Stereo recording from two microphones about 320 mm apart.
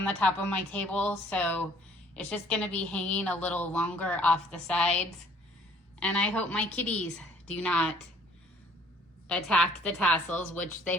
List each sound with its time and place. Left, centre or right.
0.0 s a woman's voice: centre
9.3 s a woman's voice: centre